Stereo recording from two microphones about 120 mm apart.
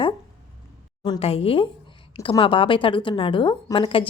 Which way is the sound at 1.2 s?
55° left (ahead or behind).